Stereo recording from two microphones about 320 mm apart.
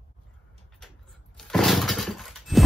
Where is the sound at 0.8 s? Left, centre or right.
Centre.